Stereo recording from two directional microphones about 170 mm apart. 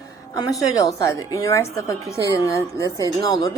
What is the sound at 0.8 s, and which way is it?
Speech, 20° left (ahead or behind).